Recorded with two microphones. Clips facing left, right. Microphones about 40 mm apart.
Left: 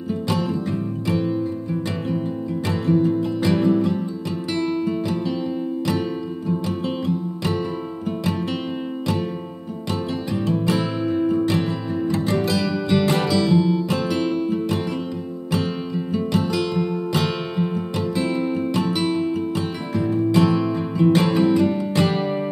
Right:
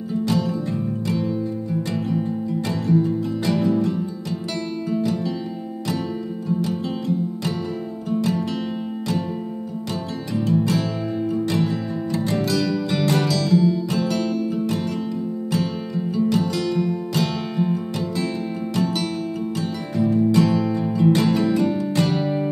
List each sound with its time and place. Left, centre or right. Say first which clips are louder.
0.2 s music: right 2 dB; left
2.9 s music: left 2 dB; left
8.1 s music: right 3 dB; left
10.5 s music: right 1 dB; left
12.3 s music: even; centre